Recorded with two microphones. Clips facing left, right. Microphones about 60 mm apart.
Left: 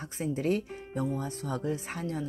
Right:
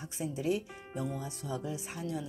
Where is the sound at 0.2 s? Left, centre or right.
Left.